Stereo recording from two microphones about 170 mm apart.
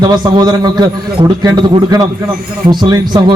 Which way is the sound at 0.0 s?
25° right (ahead or behind).